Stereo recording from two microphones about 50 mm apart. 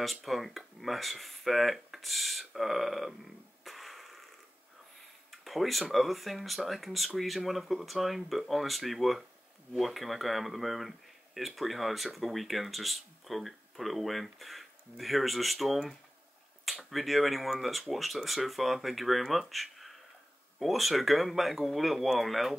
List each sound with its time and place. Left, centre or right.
0.0 s speech: centre
3.6 s a sound: centre
5.3 s speech: centre